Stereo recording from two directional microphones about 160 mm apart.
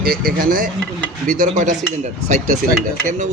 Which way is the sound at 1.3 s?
50° right (ahead or behind).